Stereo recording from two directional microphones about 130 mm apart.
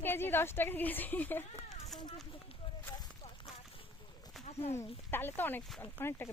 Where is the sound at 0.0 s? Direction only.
15° left (ahead or behind).